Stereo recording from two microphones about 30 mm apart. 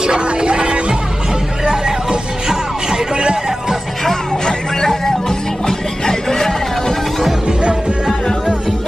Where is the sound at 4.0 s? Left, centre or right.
Centre.